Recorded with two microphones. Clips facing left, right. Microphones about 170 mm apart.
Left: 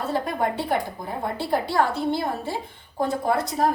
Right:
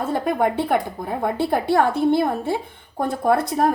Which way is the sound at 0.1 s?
55° right (ahead or behind).